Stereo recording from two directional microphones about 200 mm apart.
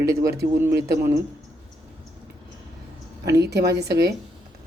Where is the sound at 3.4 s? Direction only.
55° right (ahead or behind).